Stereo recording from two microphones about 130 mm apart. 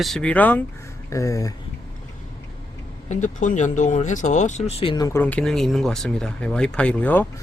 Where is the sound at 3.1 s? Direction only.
70° left (ahead or behind); by 4.9 s 50° left (ahead or behind).